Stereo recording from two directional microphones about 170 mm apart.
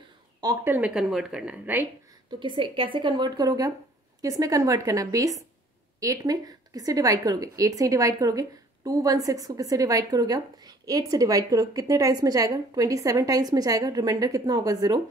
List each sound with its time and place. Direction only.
0.4 s speech: 20° right (ahead or behind)
0.7 s a woman's voice: 5° right (ahead or behind)
2.4 s speech: 30° right (ahead or behind)